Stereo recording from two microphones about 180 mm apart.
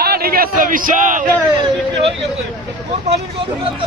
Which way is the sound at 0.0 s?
60° right (ahead or behind).